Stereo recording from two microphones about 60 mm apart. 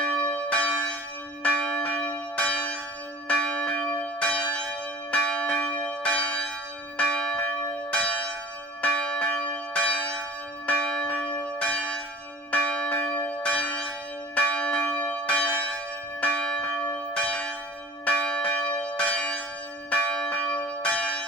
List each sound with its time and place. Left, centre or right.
0.0 s church bell: centre